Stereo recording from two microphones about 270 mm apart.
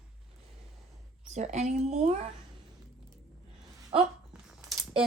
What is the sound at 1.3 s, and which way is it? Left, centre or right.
Speech, right.